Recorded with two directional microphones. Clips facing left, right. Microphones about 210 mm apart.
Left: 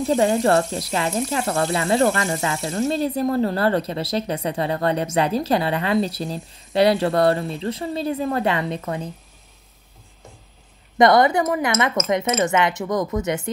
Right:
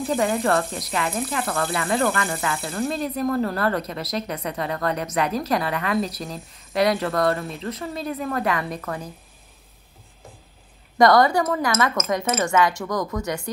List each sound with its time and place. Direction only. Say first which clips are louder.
0.1 s a woman's voice: left 4 dB; 30° left (ahead or behind)
8.8 s speech: left 3 dB; 20° left (ahead or behind)
11.0 s a woman's voice: left 1 dB; 20° left (ahead or behind)